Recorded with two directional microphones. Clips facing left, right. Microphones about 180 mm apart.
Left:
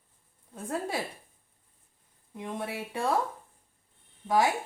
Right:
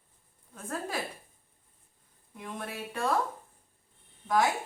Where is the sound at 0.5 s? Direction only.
20° left (ahead or behind).